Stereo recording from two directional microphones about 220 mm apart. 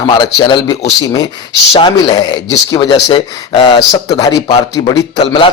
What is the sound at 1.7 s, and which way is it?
Speech, 20° left (ahead or behind).